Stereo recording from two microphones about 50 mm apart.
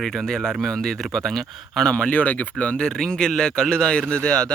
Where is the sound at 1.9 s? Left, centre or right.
Left.